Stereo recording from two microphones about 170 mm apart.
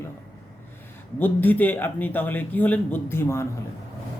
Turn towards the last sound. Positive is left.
turn(degrees=15)  # may be behind; listen again after turning